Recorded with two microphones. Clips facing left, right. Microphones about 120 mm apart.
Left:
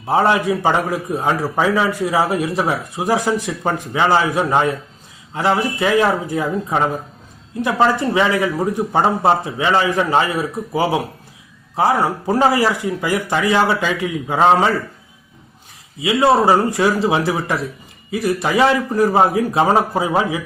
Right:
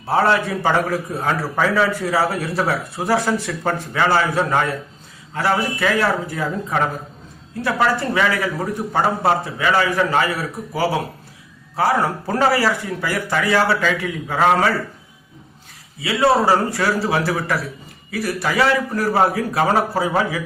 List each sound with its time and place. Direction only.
0.1 s a man's voice: 15° left (ahead or behind)
16.0 s speech: 20° left (ahead or behind)